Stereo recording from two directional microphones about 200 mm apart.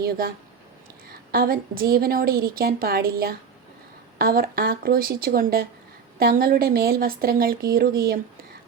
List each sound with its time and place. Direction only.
0.0 s a woman's voice: 50° right (ahead or behind)